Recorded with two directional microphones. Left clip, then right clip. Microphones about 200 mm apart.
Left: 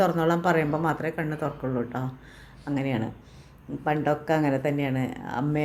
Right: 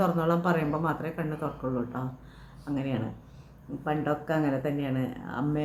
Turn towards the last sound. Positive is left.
turn(degrees=5)  # may be behind; listen again after turning